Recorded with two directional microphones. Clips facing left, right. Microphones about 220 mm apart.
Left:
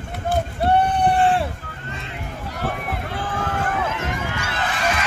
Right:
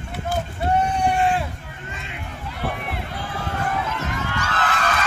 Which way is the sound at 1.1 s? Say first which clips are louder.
Left 3 dB; 30° left (ahead or behind).